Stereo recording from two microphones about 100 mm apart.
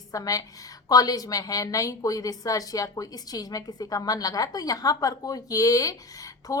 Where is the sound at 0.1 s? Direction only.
35° left (ahead or behind).